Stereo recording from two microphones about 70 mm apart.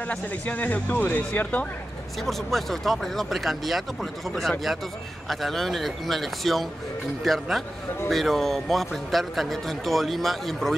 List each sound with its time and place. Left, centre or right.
0.1 s speech: left
2.2 s speech: centre